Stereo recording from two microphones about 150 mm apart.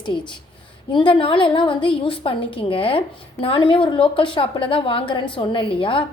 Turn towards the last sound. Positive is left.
turn(degrees=35)  # may be behind; listen again after turning